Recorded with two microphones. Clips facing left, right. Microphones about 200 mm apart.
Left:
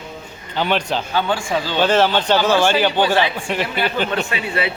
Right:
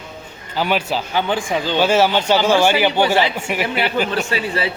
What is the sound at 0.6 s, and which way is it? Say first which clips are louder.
Speech: even; 10° right (ahead or behind).